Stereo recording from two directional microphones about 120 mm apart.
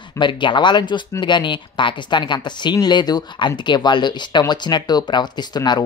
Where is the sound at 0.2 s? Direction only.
40° left (ahead or behind).